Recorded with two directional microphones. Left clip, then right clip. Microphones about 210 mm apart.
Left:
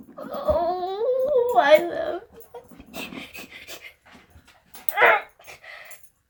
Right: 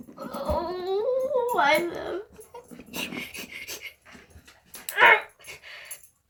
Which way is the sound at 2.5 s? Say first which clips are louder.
Even; 10° left (ahead or behind).